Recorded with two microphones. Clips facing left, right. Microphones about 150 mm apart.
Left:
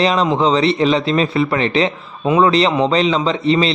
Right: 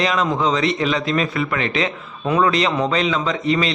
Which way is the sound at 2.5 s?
30° left (ahead or behind).